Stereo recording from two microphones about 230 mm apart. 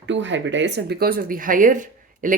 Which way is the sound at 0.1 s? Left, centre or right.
Right.